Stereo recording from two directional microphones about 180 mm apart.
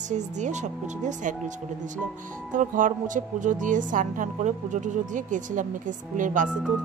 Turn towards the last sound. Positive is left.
turn(degrees=-45)  # may be behind; listen again after turning